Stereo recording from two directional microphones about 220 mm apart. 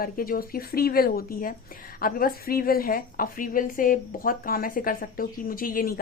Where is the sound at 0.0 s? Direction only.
40° left (ahead or behind).